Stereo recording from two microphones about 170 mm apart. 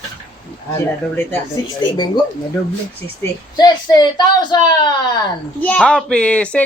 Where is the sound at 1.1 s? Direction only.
15° left (ahead or behind).